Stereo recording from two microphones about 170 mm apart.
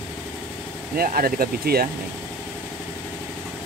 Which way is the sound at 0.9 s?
60° right (ahead or behind).